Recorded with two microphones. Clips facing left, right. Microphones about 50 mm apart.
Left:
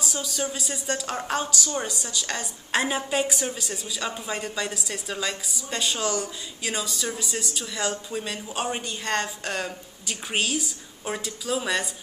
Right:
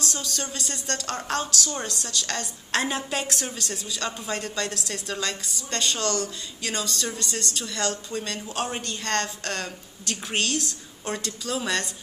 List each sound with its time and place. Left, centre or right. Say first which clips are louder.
0.0 s a woman's voice: left 2 dB; centre